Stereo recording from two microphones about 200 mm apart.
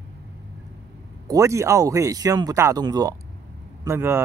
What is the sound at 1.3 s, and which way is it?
Speech, 15° right (ahead or behind).